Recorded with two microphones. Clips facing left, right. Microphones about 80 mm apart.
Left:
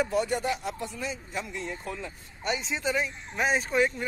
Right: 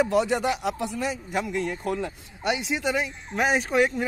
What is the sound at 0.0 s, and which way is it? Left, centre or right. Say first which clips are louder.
Speech: right 5 dB; right.